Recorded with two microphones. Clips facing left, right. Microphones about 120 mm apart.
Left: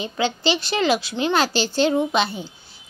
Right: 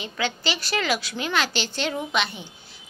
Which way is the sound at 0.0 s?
30° left (ahead or behind).